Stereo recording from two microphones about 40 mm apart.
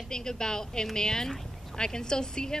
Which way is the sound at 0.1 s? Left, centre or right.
Centre.